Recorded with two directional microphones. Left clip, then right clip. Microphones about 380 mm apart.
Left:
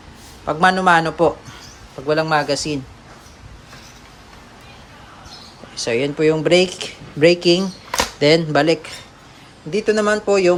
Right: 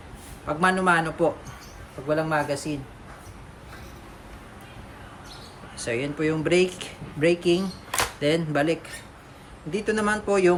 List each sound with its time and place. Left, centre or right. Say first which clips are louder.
0.4 s a man's voice: left 7 dB; centre
5.8 s speech: left 9 dB; centre